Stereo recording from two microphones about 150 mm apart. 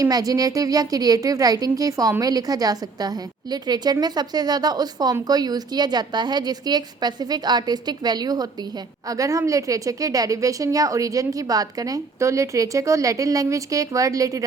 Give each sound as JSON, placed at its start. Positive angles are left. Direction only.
{"t": 0.0, "sound": "a woman's voice", "side_deg": -25}